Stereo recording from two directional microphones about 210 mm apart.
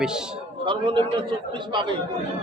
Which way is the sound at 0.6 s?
25° right (ahead or behind).